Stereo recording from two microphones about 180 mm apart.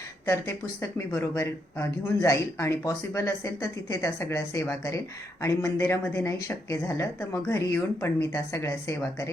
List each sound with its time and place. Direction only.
0.3 s speech: 15° left (ahead or behind)